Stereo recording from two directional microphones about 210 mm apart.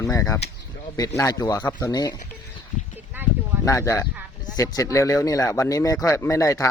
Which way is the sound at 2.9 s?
10° right (ahead or behind).